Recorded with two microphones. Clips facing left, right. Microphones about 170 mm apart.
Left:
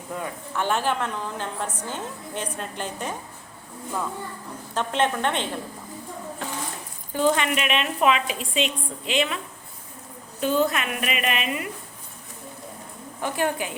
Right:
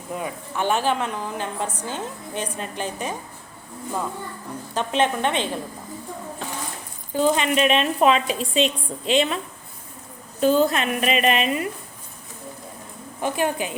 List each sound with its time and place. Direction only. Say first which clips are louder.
0.1 s a woman's voice: right 2 dB; 15° right (ahead or behind)
4.7 s a woman's voice: right 2 dB; 15° right (ahead or behind)
7.1 s speech: right 2 dB; 15° right (ahead or behind)
7.5 s a woman's voice: right 6 dB; 35° right (ahead or behind)
10.4 s a woman's voice: right 4 dB; 35° right (ahead or behind)
13.2 s a woman's voice: right 2 dB; 15° right (ahead or behind)